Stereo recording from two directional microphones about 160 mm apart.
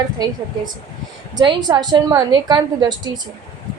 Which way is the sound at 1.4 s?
25° right (ahead or behind).